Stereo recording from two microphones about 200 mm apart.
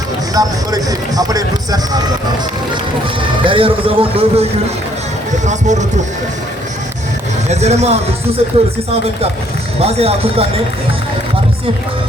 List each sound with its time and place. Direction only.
0.3 s speech: 20° right (ahead or behind)
3.4 s a man's voice: 25° right (ahead or behind)
5.5 s a man's voice: 35° right (ahead or behind)
7.4 s a man's voice: 35° right (ahead or behind)
9.8 s a man's voice: 30° right (ahead or behind)